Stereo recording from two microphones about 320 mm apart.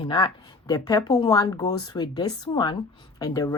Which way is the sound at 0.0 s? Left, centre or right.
Centre.